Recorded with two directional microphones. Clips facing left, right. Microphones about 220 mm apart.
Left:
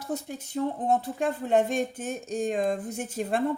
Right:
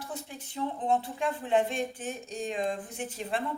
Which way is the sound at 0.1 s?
40° left (ahead or behind).